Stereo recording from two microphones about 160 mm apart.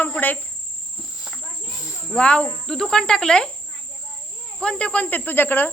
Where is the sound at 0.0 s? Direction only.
10° left (ahead or behind).